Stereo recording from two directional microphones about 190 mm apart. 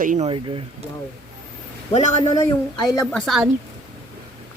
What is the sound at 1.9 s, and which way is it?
Speech, 20° left (ahead or behind).